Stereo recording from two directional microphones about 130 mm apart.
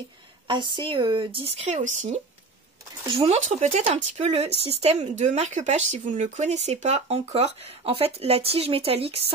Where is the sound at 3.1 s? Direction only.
50° right (ahead or behind).